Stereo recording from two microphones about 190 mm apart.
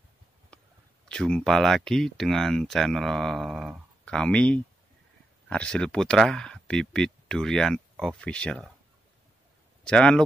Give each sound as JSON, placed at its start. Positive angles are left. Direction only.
{"t": 1.0, "sound": "speech", "side_deg": 5}
{"t": 7.9, "sound": "a sound", "side_deg": -5}
{"t": 8.2, "sound": "speech", "side_deg": 5}
{"t": 9.8, "sound": "speech", "side_deg": 5}